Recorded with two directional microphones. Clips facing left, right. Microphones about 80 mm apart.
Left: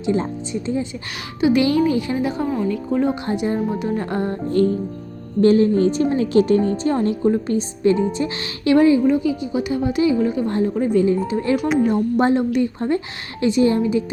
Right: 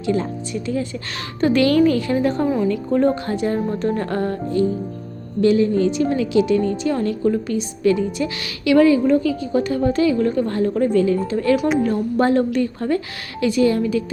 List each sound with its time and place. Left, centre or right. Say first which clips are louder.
0.0 s speech: even; left
1.4 s a woman's voice: right 1 dB; centre
3.2 s a woman's voice: even; centre
4.6 s speech: left 2 dB; left
5.4 s a woman's voice: left 2 dB; left
9.0 s a woman's voice: right 1 dB; centre
11.5 s speech: right 1 dB; centre
12.1 s speech: right 3 dB; centre